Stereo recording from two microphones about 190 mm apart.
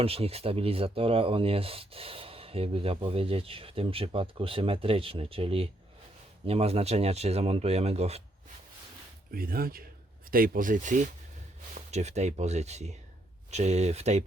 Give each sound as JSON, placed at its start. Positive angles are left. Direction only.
{"t": 0.0, "sound": "speech", "side_deg": -30}
{"t": 9.3, "sound": "speech", "side_deg": -50}